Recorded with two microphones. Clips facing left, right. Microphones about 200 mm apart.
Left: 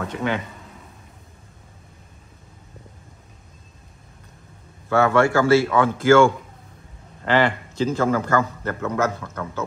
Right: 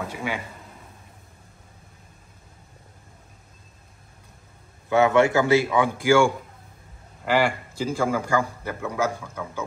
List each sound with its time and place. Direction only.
0.0 s a man's voice: 5° right (ahead or behind)
4.8 s a man's voice: 20° right (ahead or behind)